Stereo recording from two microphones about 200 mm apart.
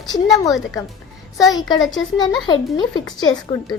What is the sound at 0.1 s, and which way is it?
A woman's voice, 15° left (ahead or behind).